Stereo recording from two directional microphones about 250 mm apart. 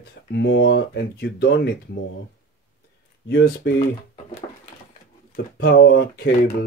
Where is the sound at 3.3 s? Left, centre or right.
Left.